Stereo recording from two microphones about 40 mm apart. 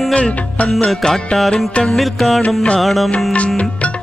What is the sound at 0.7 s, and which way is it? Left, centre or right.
Music, centre.